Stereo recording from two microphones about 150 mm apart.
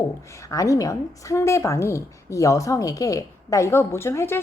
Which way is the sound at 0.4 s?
20° left (ahead or behind).